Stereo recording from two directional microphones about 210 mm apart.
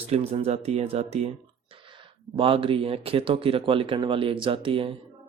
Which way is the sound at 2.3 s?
25° right (ahead or behind).